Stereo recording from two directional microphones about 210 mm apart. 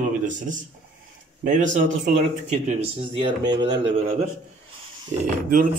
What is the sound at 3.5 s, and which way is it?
Speech, 55° right (ahead or behind).